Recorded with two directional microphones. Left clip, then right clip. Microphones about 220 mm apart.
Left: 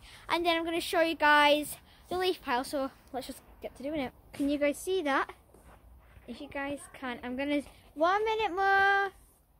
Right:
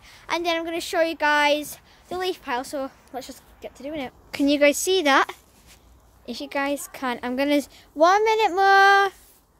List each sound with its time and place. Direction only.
0.0 s speech: 5° left (ahead or behind)
4.3 s a woman's voice: 35° right (ahead or behind)